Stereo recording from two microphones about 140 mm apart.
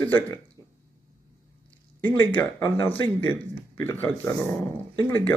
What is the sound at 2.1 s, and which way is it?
Speech, 35° left (ahead or behind).